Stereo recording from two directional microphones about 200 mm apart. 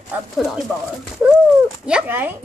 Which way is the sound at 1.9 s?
5° right (ahead or behind).